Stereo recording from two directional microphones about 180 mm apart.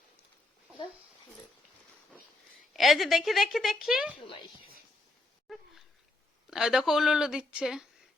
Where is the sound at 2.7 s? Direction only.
Centre (ahead or behind).